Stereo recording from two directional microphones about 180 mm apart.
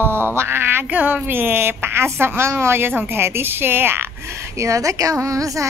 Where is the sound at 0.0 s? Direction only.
15° right (ahead or behind).